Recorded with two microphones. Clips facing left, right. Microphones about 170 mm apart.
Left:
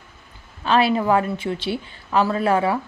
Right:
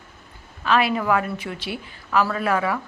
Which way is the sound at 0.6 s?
30° left (ahead or behind).